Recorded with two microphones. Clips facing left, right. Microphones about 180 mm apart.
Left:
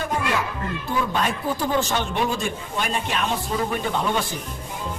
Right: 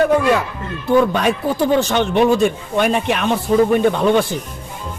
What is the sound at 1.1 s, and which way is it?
Speech, 70° right (ahead or behind).